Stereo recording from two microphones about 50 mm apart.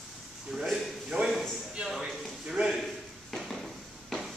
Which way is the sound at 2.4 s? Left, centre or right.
Centre.